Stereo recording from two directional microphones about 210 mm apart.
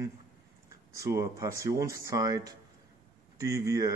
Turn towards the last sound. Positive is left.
turn(degrees=-15)  # may be behind; listen again after turning